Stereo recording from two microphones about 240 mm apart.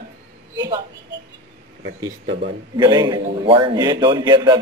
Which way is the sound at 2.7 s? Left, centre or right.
Centre.